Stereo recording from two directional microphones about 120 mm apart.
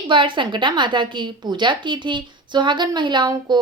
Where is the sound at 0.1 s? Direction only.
45° right (ahead or behind).